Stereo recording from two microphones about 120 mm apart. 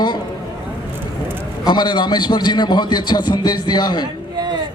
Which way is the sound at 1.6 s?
35° left (ahead or behind).